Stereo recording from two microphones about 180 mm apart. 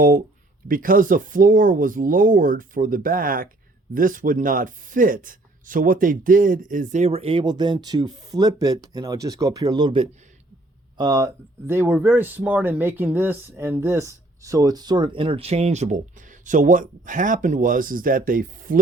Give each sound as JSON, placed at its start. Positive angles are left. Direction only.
{"t": 0.7, "sound": "speech", "side_deg": -50}